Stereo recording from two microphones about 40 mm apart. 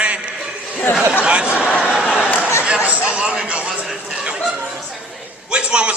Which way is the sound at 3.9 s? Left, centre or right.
Centre.